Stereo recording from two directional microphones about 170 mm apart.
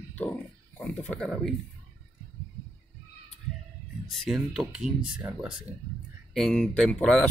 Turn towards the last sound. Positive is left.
turn(degrees=5)  # may be behind; listen again after turning